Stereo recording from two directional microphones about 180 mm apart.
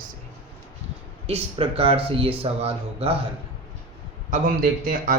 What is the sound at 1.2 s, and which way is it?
A man's voice, 30° right (ahead or behind).